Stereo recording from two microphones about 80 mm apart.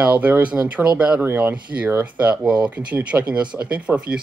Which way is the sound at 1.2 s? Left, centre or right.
Right.